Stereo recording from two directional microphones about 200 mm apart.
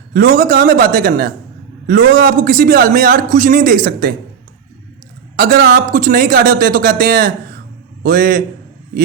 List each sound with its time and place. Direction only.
0.1 s a man's voice: 45° right (ahead or behind)
5.4 s a man's voice: 45° right (ahead or behind)